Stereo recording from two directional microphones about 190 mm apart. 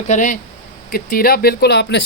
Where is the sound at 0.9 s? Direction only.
50° left (ahead or behind).